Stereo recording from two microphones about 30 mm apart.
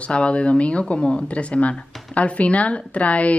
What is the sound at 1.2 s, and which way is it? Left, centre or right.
Speech, left.